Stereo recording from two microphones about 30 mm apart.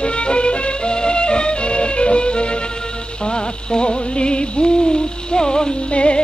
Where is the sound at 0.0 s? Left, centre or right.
Left.